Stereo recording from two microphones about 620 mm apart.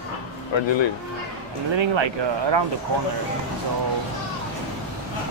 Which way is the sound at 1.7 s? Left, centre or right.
Right.